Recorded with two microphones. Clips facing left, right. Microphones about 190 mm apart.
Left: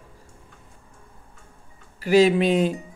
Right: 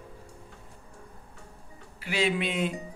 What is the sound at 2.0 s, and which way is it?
Speech, 40° left (ahead or behind).